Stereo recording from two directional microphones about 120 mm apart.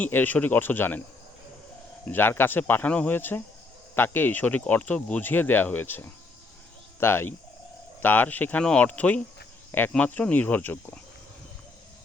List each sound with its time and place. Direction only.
0.0 s speech: 15° left (ahead or behind)
2.0 s speech: 15° left (ahead or behind)